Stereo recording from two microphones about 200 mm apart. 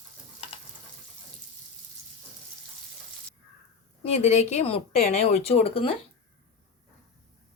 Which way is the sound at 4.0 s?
30° left (ahead or behind).